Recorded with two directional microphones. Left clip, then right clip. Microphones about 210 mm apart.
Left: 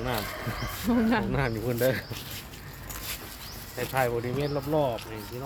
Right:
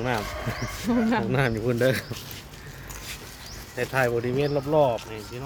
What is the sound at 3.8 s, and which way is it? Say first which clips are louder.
Speech: right 3 dB; 45° right (ahead or behind).